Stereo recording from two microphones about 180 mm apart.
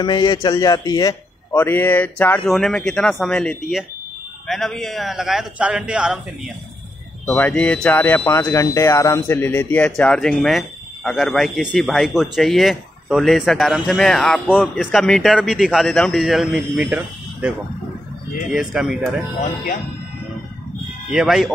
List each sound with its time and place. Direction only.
0.0 s a man's voice: 25° left (ahead or behind); by 6.1 s 5° right (ahead or behind)
7.2 s speech: 10° left (ahead or behind)
19.4 s speech: 45° left (ahead or behind)
21.1 s speech: centre (ahead or behind)